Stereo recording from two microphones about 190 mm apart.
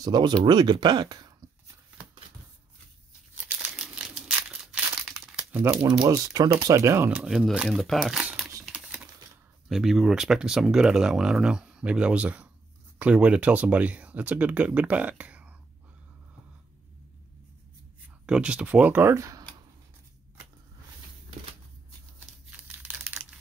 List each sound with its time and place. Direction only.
0.0 s speech: 20° right (ahead or behind)
3.3 s crumpling: 5° right (ahead or behind)
5.9 s speech: 20° right (ahead or behind)
8.6 s typing: 5° right (ahead or behind)
9.7 s speech: centre (ahead or behind)
18.2 s speech: 5° right (ahead or behind)
22.6 s a sound: 5° right (ahead or behind)